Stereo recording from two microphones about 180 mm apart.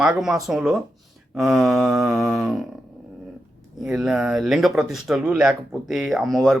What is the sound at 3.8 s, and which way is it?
Speech, 5° right (ahead or behind).